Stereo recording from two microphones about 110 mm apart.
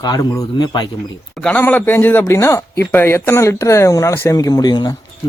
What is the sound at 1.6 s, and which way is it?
Speech, 15° left (ahead or behind).